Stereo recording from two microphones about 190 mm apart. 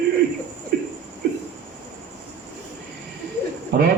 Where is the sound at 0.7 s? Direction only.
55° right (ahead or behind).